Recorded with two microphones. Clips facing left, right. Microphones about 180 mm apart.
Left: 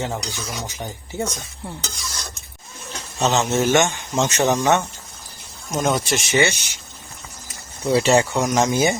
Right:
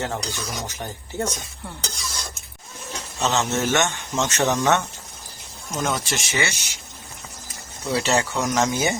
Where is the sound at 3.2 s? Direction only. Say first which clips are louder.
Left 4 dB; 15° left (ahead or behind).